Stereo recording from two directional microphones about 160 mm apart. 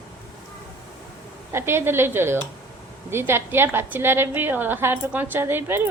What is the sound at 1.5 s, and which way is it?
A woman's voice, 15° right (ahead or behind).